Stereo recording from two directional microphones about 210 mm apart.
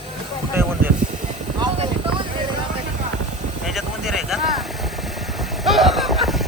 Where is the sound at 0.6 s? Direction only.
10° right (ahead or behind).